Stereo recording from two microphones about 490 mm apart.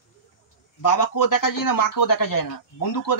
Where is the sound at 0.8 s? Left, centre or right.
Left.